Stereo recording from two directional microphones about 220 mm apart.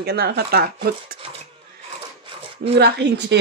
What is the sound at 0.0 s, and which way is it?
Speech, 45° right (ahead or behind).